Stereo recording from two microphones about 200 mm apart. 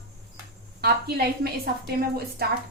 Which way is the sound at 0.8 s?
50° right (ahead or behind).